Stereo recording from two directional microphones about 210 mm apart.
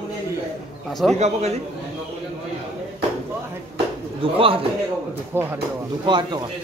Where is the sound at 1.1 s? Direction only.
30° right (ahead or behind).